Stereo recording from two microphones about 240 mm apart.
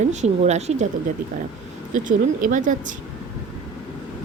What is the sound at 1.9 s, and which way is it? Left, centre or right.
Speech, right.